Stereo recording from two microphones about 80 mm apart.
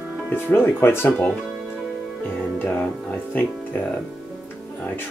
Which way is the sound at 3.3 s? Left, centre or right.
Left.